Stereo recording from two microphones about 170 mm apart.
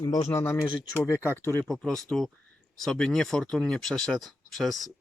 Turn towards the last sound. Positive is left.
turn(degrees=0)  # may be behind; listen again after turning